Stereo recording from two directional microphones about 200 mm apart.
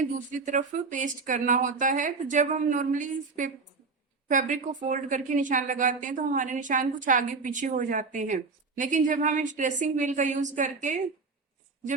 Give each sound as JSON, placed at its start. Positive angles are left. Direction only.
{"t": 0.2, "sound": "a woman's voice", "side_deg": -40}